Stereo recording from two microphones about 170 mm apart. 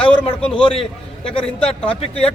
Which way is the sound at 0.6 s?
35° left (ahead or behind).